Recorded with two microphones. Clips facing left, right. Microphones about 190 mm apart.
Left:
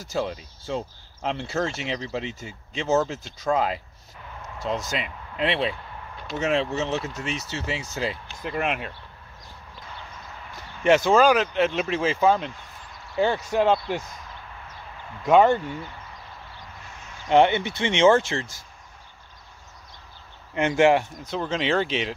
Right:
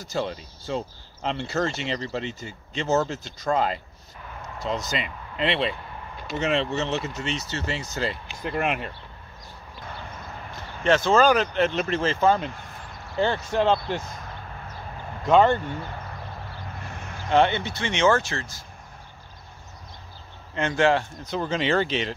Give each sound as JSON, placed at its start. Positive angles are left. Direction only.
{"t": 0.0, "sound": "speech", "side_deg": 5}
{"t": 4.9, "sound": "speech", "side_deg": 0}
{"t": 10.8, "sound": "speech", "side_deg": 15}
{"t": 15.2, "sound": "speech", "side_deg": 10}
{"t": 16.8, "sound": "a sound", "side_deg": -55}
{"t": 17.3, "sound": "speech", "side_deg": 20}
{"t": 20.5, "sound": "speech", "side_deg": 20}
{"t": 21.3, "sound": "speech", "side_deg": 0}